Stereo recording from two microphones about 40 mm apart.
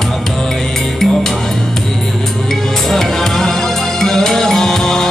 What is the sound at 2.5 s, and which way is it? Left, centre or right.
Music, centre.